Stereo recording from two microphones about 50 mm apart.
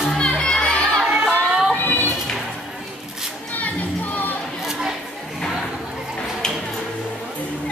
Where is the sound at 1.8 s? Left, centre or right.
Left.